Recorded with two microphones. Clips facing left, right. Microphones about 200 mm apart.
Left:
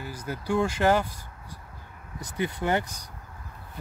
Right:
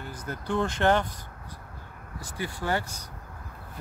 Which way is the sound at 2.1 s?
20° left (ahead or behind).